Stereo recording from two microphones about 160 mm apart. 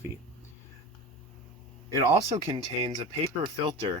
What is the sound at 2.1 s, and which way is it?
Speech, 40° right (ahead or behind).